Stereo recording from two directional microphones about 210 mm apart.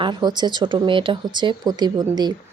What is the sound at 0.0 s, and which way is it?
Speech, 20° right (ahead or behind).